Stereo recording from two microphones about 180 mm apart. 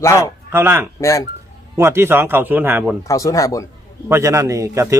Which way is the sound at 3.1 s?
15° left (ahead or behind).